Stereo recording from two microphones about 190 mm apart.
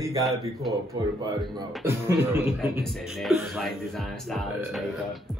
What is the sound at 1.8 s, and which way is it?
Music, 10° right (ahead or behind).